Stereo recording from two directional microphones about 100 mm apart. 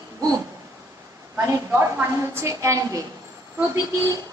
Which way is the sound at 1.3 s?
25° right (ahead or behind).